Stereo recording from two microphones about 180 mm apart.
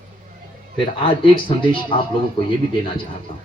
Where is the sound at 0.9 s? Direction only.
30° left (ahead or behind).